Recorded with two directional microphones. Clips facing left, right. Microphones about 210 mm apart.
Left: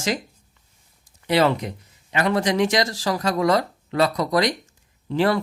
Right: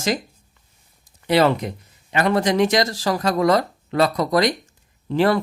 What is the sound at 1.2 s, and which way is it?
Speech, 45° right (ahead or behind).